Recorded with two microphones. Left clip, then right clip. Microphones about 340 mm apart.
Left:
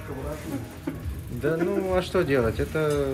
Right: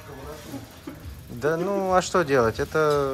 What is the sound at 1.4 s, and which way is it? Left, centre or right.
Speech, centre.